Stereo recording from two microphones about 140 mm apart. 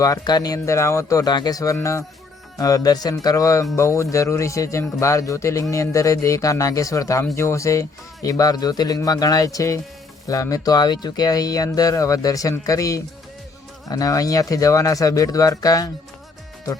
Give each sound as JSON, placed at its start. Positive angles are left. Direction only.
{"t": 0.0, "sound": "speech", "side_deg": 25}